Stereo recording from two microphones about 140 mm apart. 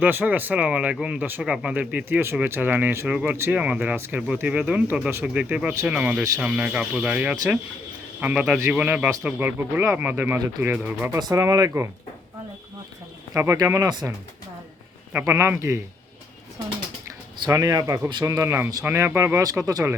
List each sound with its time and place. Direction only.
0.0 s speech: 10° right (ahead or behind)
11.2 s speech: 25° right (ahead or behind)
13.3 s speech: 20° right (ahead or behind)
15.1 s speech: 15° right (ahead or behind)
17.4 s speech: 25° right (ahead or behind)